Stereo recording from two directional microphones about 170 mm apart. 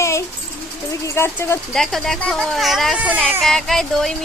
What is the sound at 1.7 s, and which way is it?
Speech, centre (ahead or behind).